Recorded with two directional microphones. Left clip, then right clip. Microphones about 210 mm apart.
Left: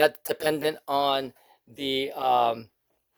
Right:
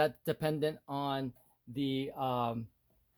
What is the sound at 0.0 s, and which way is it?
Speech, 40° left (ahead or behind).